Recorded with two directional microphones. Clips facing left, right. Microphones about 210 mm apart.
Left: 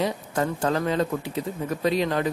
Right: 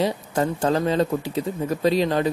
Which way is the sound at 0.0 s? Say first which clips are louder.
Right 3 dB; 30° right (ahead or behind).